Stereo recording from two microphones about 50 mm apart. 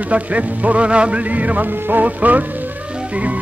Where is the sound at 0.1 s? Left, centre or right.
Right.